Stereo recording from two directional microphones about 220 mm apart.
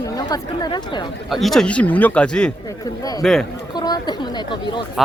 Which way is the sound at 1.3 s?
Centre (ahead or behind).